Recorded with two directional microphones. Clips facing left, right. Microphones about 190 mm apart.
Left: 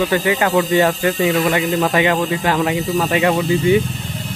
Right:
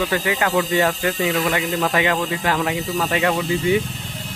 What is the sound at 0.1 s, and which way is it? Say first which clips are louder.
Speech: left 4 dB; 25° left (ahead or behind).